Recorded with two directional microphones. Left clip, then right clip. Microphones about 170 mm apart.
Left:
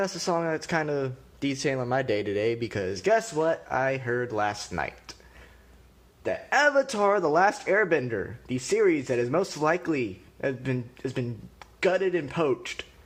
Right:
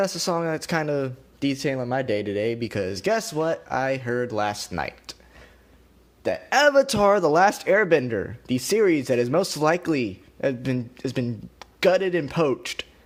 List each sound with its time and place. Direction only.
0.0 s speech: 30° right (ahead or behind)